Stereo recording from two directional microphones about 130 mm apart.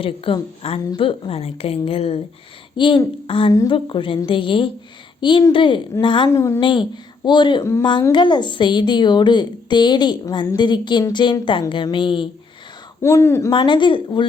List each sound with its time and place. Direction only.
0.3 s a woman's voice: 45° left (ahead or behind)
2.7 s a woman's voice: 40° left (ahead or behind)
6.3 s speech: 20° left (ahead or behind)
6.6 s a woman's voice: 40° left (ahead or behind)
7.6 s speech: 20° left (ahead or behind)
8.1 s a woman's voice: 35° left (ahead or behind)
13.0 s speech: 20° left (ahead or behind)
13.5 s a woman's voice: 40° left (ahead or behind)